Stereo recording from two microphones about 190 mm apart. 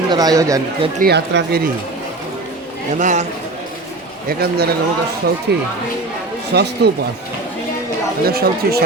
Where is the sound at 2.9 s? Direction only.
40° right (ahead or behind).